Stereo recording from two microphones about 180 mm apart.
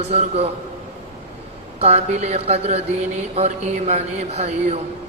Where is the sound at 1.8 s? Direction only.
35° right (ahead or behind).